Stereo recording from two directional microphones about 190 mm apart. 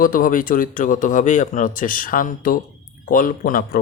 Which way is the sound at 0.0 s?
45° left (ahead or behind).